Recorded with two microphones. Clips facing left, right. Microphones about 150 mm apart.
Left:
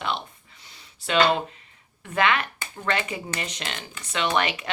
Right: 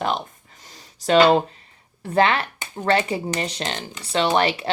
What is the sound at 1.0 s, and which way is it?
Speech, 35° right (ahead or behind).